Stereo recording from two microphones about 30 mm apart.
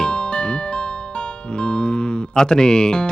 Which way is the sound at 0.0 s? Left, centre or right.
Left.